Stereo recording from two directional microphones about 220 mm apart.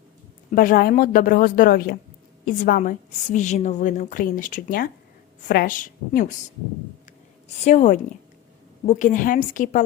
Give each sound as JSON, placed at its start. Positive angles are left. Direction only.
{"t": 0.5, "sound": "a woman's voice", "side_deg": 40}
{"t": 7.6, "sound": "a woman's voice", "side_deg": 30}